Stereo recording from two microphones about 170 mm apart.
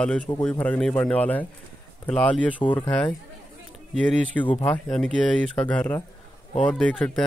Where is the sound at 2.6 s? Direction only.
30° left (ahead or behind).